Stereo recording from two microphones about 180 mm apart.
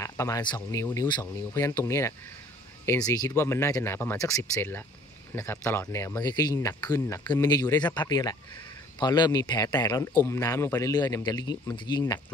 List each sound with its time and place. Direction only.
0.0 s speech: 15° left (ahead or behind)